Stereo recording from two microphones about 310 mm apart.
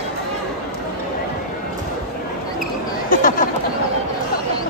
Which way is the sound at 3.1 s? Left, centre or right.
Left.